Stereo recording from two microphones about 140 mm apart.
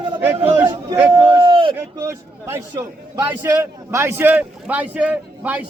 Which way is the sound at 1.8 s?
20° right (ahead or behind).